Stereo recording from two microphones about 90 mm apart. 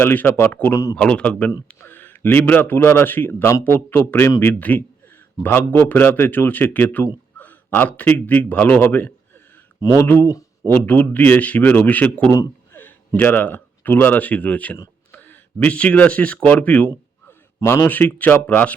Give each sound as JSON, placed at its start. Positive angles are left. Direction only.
{"t": 0.0, "sound": "a man's voice", "side_deg": 20}
{"t": 0.7, "sound": "speech", "side_deg": 40}
{"t": 0.9, "sound": "a man's voice", "side_deg": 10}
{"t": 9.8, "sound": "speech", "side_deg": 40}
{"t": 10.2, "sound": "a sound", "side_deg": 35}
{"t": 10.8, "sound": "a man's voice", "side_deg": 20}